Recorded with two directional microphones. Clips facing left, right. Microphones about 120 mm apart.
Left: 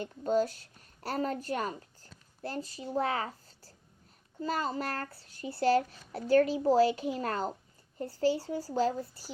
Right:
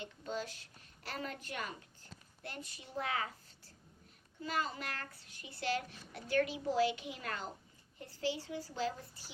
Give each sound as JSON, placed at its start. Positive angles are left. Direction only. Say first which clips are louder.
{"t": 0.0, "sound": "a woman's voice", "louder": "left 13 dB", "side_deg": 45}